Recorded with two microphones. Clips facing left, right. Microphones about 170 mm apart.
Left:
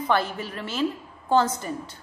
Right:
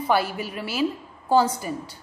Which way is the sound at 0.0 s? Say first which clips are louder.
Right 2 dB; 10° right (ahead or behind).